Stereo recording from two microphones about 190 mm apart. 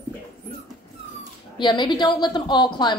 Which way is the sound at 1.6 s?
25° left (ahead or behind).